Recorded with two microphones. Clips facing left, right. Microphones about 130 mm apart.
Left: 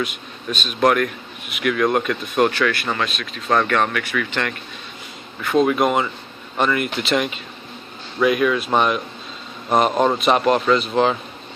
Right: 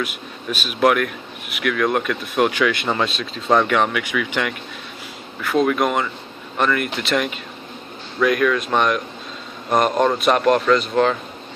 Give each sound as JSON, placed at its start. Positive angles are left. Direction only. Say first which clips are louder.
{"t": 0.0, "sound": "speech", "louder": "left 1 dB", "side_deg": -5}
{"t": 3.5, "sound": "speech", "louder": "right 1 dB", "side_deg": -10}